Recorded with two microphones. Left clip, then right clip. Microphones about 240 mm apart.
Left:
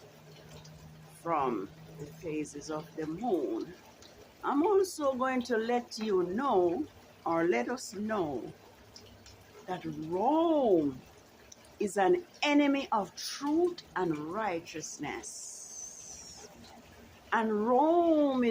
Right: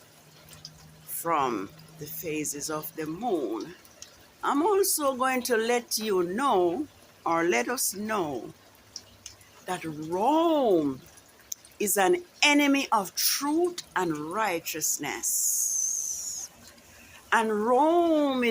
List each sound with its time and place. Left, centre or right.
1.2 s speech: right
4.4 s speech: centre
9.6 s speech: centre
17.2 s speech: centre